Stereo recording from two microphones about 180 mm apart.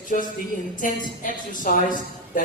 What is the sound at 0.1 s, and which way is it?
A woman's voice, 50° left (ahead or behind).